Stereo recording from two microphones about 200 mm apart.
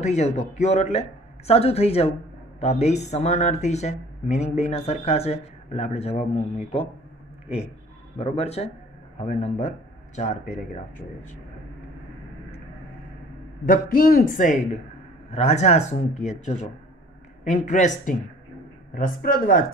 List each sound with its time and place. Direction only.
0.0 s speech: 35° left (ahead or behind)
7.4 s speech: 30° left (ahead or behind)
13.7 s a woman's voice: 45° left (ahead or behind)